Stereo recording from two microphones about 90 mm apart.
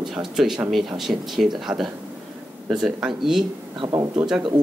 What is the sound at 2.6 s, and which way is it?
Speech, 5° right (ahead or behind).